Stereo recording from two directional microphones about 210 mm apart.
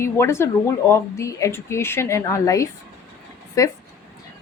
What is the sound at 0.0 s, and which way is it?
A woman's voice, 10° left (ahead or behind).